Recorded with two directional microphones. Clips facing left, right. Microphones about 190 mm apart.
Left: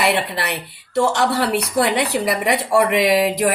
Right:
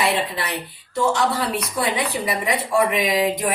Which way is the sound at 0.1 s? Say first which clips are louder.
Left 2 dB; 70° left (ahead or behind).